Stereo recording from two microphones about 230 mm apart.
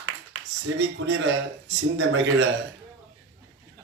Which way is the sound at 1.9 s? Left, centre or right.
Right.